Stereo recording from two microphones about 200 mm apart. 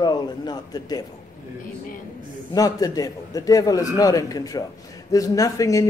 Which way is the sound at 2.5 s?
20° left (ahead or behind).